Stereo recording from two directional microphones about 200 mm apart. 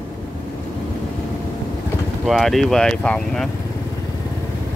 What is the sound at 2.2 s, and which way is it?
Speech, centre (ahead or behind).